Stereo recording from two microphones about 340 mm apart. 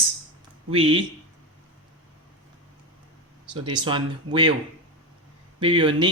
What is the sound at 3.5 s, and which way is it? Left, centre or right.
Speech, centre.